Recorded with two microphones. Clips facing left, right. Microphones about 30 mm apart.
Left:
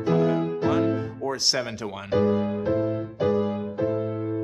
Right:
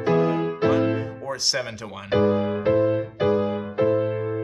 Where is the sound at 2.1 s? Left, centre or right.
Right.